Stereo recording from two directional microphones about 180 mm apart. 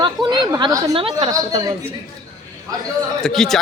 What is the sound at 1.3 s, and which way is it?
Speech, 20° right (ahead or behind).